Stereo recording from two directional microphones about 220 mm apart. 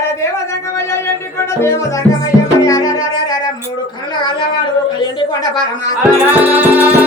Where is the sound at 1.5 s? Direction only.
10° left (ahead or behind).